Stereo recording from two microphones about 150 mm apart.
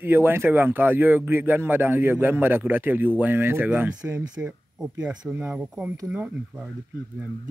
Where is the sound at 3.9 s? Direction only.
25° right (ahead or behind).